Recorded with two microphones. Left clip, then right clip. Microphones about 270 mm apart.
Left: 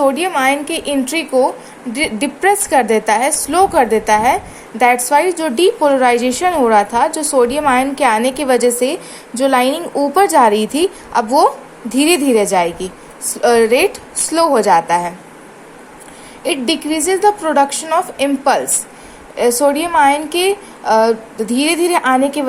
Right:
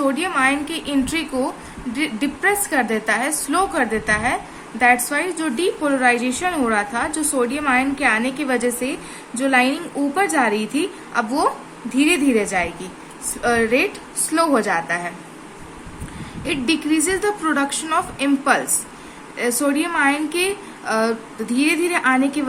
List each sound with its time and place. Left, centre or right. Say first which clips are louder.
0.1 s a woman's voice: left 4 dB; centre
16.4 s a woman's voice: left 4 dB; centre